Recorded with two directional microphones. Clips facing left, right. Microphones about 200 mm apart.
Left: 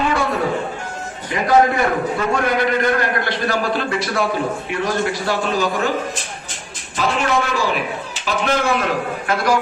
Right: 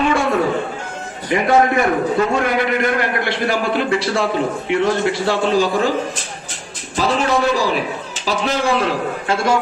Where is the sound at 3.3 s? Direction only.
20° right (ahead or behind).